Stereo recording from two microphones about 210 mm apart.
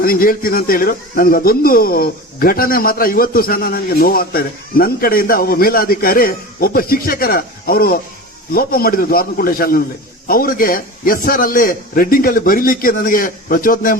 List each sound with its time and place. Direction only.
0.0 s speech: 45° left (ahead or behind)